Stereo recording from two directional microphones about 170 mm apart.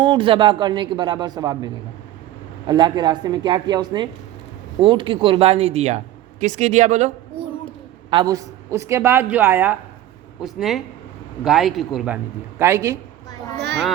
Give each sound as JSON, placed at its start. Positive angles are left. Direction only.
{"t": 0.0, "sound": "a man's voice", "side_deg": -30}
{"t": 8.1, "sound": "a woman's voice", "side_deg": -25}
{"t": 10.4, "sound": "a man's voice", "side_deg": 0}
{"t": 13.6, "sound": "children playing", "side_deg": -80}